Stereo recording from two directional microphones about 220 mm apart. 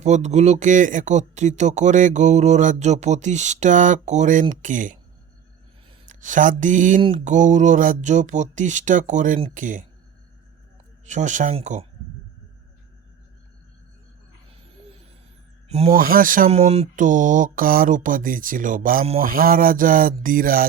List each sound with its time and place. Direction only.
0.0 s speech: 30° right (ahead or behind)
6.1 s speech: 35° right (ahead or behind)
11.0 s speech: 35° right (ahead or behind)
14.5 s owl: 25° right (ahead or behind)
16.0 s speech: 40° right (ahead or behind)